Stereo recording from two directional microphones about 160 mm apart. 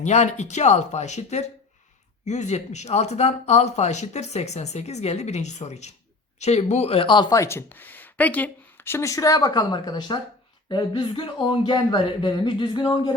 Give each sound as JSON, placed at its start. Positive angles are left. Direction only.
{"t": 0.0, "sound": "speech", "side_deg": 45}